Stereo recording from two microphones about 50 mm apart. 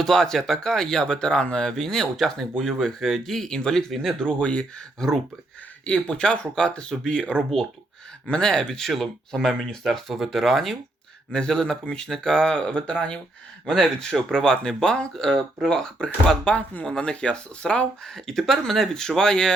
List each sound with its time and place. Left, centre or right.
0.0 s speech: centre
4.9 s speech: centre
5.8 s speech: left; by 10.8 s centre
11.3 s speech: centre
13.7 s speech: centre
18.1 s speech: centre